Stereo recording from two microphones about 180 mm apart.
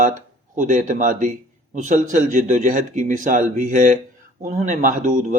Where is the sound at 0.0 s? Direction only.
45° right (ahead or behind).